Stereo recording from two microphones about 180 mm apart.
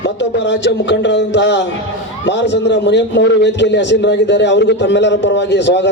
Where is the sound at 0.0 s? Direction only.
80° left.